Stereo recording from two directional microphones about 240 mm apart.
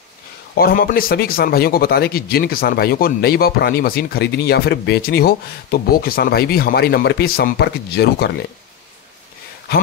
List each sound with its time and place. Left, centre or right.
0.6 s speech: left